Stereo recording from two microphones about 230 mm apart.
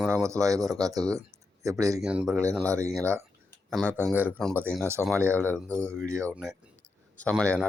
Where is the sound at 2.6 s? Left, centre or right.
Centre.